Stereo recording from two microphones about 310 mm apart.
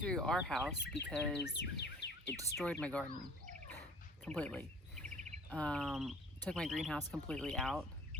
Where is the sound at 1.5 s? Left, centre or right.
Left.